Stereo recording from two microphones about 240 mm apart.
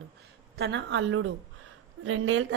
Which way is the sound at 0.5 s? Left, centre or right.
Right.